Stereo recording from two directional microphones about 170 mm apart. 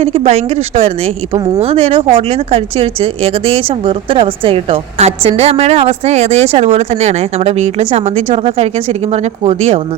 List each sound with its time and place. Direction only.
0.0 s speech: 35° right (ahead or behind)